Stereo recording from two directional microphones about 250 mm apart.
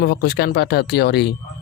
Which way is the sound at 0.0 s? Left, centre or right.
Left.